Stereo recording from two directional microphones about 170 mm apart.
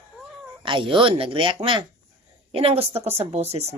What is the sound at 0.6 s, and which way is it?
Speech, 30° right (ahead or behind).